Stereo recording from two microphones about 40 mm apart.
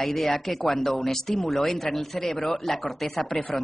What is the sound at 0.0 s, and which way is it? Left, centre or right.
A man's voice, centre.